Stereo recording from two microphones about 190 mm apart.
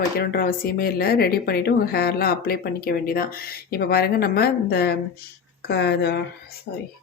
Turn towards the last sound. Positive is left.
turn(degrees=55)  # may be behind; listen again after turning